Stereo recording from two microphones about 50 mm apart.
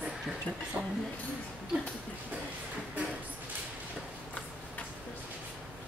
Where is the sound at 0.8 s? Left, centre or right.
Right.